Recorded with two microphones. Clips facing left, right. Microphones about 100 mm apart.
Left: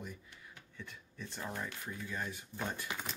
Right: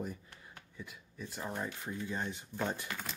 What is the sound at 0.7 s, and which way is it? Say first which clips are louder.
Speech: right 2 dB; 10° right (ahead or behind).